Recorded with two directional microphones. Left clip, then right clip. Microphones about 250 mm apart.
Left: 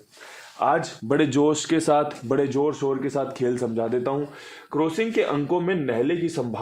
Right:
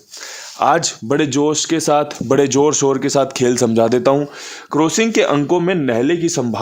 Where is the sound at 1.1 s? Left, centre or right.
Centre; by 6.6 s right.